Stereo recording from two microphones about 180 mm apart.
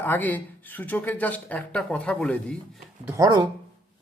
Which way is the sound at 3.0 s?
15° right (ahead or behind).